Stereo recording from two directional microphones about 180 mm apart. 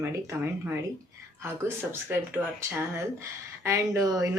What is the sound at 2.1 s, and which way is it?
Speech, 10° right (ahead or behind).